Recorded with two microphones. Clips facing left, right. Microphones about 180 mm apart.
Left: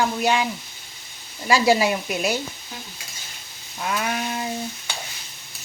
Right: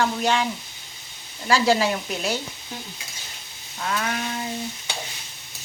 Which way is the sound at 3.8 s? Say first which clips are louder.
Left 1 dB; 15° left (ahead or behind).